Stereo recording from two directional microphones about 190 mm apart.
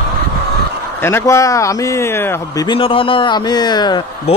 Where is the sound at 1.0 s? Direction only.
15° left (ahead or behind).